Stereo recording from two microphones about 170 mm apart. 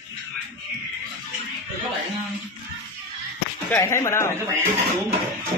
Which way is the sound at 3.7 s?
15° left (ahead or behind).